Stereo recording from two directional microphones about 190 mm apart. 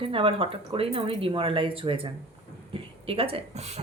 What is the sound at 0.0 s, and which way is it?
A woman's voice, 30° right (ahead or behind).